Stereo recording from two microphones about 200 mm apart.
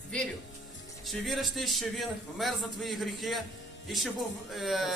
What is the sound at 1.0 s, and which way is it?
A man's voice, centre (ahead or behind).